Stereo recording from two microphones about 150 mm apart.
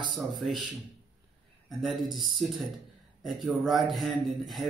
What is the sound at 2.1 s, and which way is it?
Speech, centre (ahead or behind).